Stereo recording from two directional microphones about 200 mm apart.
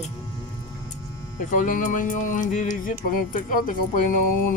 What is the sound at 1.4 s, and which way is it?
Speech, 40° left (ahead or behind).